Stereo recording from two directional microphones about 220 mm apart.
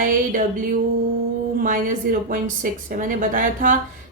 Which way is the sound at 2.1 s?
40° right (ahead or behind).